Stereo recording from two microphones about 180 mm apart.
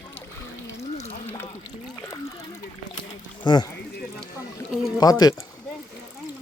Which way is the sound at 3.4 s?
25° left (ahead or behind).